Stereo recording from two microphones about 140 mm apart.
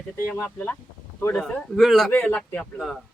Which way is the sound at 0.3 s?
15° left (ahead or behind).